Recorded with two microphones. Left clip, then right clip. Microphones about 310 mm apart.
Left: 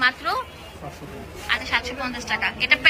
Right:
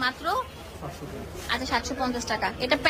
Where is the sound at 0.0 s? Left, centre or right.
Centre.